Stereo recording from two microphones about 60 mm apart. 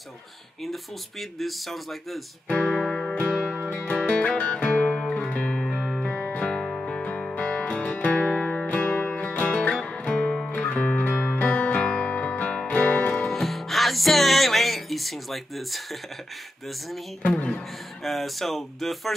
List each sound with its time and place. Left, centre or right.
1.4 s speech: centre
2.4 s music: centre
5.8 s music: centre
6.1 s music: left
8.4 s music: centre; by 13.3 s left
13.3 s music: centre
17.3 s speech: centre
18.0 s speech: centre